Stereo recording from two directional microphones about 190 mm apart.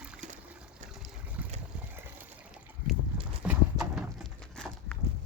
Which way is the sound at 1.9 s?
10° right (ahead or behind).